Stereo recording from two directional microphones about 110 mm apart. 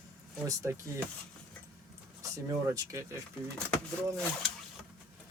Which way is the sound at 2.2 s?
30° right (ahead or behind).